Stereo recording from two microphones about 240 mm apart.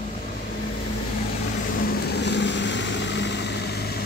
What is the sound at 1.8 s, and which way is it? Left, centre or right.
Vehicle, left.